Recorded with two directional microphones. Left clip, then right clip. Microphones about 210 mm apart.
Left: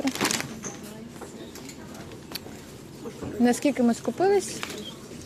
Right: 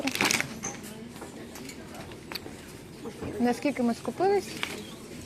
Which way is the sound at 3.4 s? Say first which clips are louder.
Left 5 dB; 30° left (ahead or behind).